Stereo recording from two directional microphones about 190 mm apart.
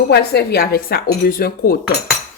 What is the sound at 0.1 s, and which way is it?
Speech, 55° left (ahead or behind).